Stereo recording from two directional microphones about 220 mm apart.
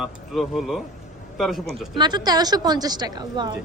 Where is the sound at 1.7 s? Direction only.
20° right (ahead or behind).